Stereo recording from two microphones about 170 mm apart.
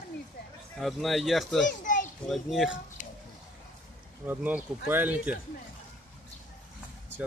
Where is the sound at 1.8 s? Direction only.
50° left (ahead or behind).